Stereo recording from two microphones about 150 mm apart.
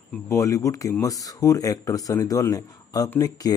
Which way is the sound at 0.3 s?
20° left (ahead or behind).